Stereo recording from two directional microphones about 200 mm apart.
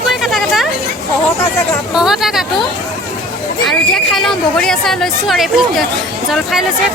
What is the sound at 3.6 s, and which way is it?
Speech, centre (ahead or behind).